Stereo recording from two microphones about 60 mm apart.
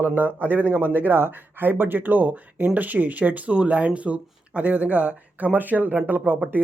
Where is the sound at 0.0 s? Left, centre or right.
Right.